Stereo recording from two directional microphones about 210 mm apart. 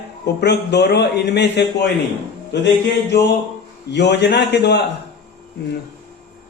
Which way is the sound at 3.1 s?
50° left (ahead or behind).